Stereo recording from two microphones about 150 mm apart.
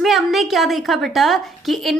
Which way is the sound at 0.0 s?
Centre (ahead or behind).